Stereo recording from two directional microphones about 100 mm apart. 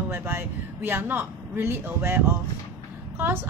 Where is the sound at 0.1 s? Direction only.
20° right (ahead or behind).